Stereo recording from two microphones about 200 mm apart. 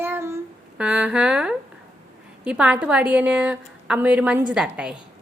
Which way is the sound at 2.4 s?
5° right (ahead or behind).